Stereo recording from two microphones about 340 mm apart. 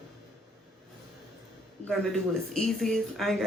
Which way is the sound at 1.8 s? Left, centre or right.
Centre.